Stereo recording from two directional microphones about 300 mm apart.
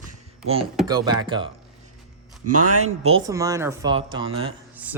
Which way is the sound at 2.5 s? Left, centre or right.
Right.